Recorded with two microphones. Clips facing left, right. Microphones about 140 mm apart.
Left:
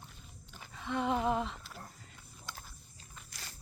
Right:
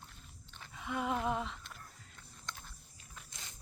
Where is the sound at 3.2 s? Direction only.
20° right (ahead or behind).